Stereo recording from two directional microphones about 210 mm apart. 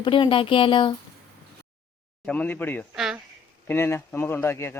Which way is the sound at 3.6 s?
10° left (ahead or behind).